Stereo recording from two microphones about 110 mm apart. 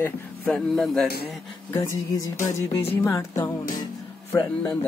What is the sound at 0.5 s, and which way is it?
Speech, centre (ahead or behind).